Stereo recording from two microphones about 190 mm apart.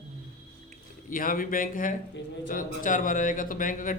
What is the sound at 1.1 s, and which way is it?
A man's voice, 45° left (ahead or behind).